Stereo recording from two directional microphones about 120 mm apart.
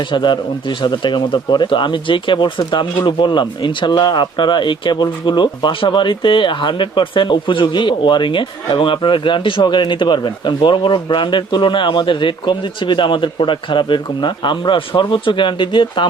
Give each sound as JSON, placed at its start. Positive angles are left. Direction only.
{"t": 0.1, "sound": "speech", "side_deg": 40}